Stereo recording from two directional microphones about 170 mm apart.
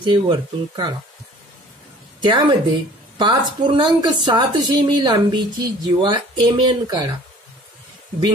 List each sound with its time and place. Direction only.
0.0 s a woman's voice: 30° right (ahead or behind)
2.2 s a woman's voice: 25° right (ahead or behind)